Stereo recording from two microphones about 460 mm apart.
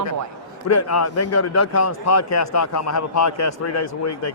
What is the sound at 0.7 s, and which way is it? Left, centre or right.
Speech, left.